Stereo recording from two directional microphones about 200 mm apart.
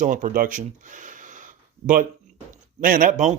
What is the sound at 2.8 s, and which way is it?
Speech, 45° right (ahead or behind).